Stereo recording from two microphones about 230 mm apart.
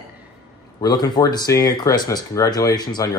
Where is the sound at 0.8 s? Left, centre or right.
Centre.